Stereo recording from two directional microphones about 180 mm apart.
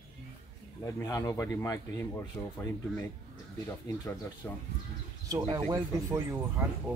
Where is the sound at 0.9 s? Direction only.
15° left (ahead or behind).